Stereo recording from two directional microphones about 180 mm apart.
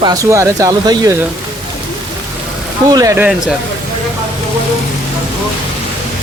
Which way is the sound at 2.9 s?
20° right (ahead or behind).